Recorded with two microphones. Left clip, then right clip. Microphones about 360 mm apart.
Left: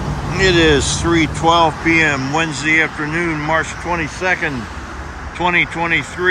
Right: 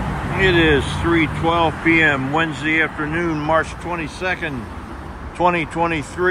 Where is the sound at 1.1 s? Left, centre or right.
Centre.